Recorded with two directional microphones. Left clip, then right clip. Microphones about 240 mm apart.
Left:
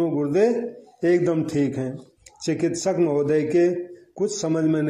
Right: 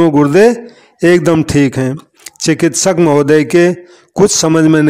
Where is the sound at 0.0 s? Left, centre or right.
Right.